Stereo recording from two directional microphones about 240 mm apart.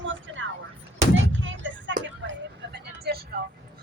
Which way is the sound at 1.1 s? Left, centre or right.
Right.